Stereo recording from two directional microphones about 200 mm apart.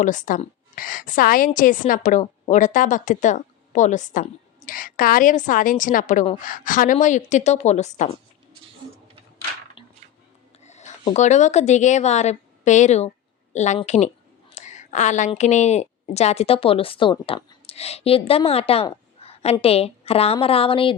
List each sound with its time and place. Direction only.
0.0 s a woman's voice: 40° left (ahead or behind)
10.6 s a woman's voice: 35° left (ahead or behind)